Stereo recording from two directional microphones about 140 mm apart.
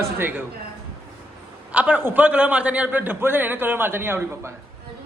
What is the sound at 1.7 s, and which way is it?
A man's voice, 10° right (ahead or behind).